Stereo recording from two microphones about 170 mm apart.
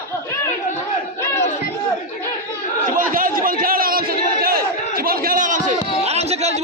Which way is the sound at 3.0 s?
55° right (ahead or behind).